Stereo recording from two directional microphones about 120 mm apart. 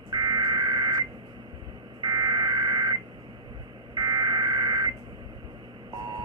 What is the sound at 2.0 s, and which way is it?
Buzzer, 35° right (ahead or behind).